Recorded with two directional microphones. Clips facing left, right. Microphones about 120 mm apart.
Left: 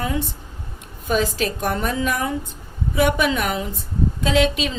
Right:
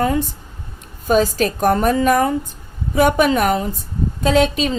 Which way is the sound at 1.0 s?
40° right (ahead or behind).